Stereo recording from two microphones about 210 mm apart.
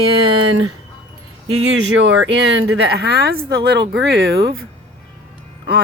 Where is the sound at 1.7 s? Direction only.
65° right (ahead or behind).